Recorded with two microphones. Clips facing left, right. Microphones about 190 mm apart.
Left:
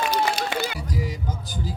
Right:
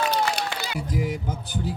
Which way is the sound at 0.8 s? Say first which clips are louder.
Right 2 dB; 55° right (ahead or behind).